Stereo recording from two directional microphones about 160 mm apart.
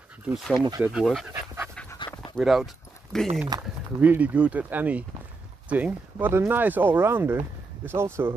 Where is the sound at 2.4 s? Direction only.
Centre (ahead or behind).